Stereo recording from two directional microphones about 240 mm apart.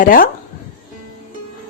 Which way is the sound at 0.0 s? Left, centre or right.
Left.